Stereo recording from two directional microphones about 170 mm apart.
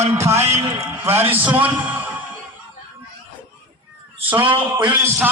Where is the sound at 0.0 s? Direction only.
15° right (ahead or behind).